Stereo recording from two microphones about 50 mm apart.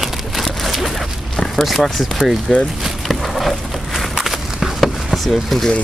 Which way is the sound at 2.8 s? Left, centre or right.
Centre.